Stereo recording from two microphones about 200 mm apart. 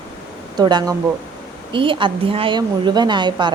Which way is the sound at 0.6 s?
20° right (ahead or behind).